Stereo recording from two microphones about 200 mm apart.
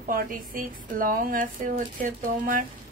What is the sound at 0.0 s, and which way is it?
A woman's voice, 45° right (ahead or behind).